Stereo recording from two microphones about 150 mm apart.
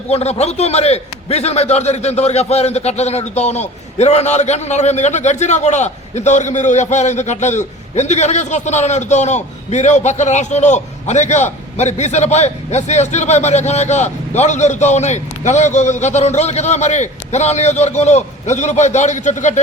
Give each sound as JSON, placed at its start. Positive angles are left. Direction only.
{"t": 0.1, "sound": "a man's voice", "side_deg": 45}